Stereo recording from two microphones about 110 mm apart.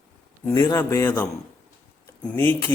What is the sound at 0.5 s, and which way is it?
Speech, 30° left (ahead or behind).